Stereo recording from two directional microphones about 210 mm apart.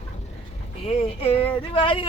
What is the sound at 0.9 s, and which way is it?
Speech, 30° left (ahead or behind).